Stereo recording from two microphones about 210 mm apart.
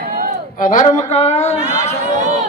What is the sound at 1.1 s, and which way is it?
Speech, 30° left (ahead or behind).